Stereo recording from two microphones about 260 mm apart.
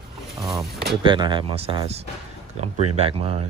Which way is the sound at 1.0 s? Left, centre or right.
Centre.